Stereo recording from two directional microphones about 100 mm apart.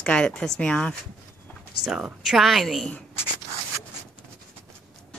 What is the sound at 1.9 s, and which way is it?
A woman's voice, 5° right (ahead or behind).